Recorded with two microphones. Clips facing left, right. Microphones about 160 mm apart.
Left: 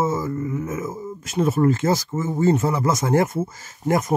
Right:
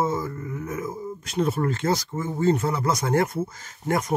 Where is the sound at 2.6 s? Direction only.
45° left (ahead or behind).